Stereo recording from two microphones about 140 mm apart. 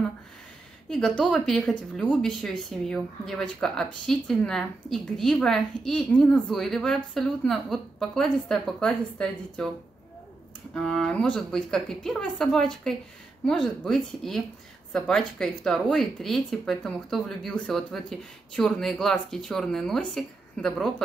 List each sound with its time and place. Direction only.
0.8 s speech: 5° left (ahead or behind)
10.7 s speech: 5° left (ahead or behind)